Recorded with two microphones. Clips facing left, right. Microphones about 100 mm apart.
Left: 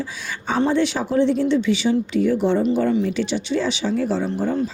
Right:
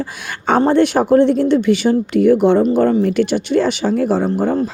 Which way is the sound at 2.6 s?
50° right (ahead or behind).